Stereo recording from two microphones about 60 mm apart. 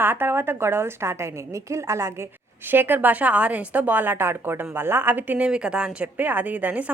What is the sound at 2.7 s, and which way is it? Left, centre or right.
A woman's voice, right.